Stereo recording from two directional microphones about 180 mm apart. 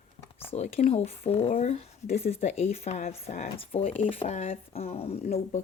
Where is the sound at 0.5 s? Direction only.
35° left (ahead or behind).